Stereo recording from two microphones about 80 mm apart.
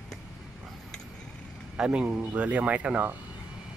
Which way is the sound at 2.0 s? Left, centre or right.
Centre.